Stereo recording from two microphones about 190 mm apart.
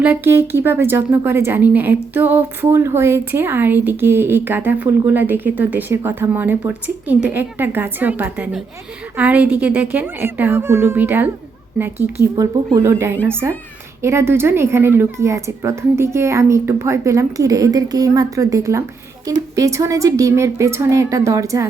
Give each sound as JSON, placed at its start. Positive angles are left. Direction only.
{"t": 0.0, "sound": "speech", "side_deg": -10}
{"t": 12.4, "sound": "speech", "side_deg": -15}